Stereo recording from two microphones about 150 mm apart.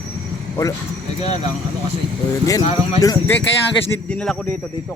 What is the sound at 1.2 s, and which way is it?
Speech, 45° left (ahead or behind).